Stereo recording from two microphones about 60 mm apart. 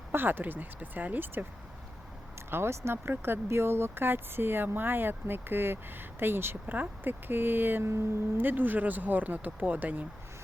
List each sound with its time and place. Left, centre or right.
0.1 s speech: right
2.5 s speech: right
7.9 s speech: right
8.4 s speech: right